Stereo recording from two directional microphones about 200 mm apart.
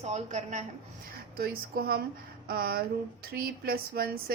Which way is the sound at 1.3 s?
50° right (ahead or behind).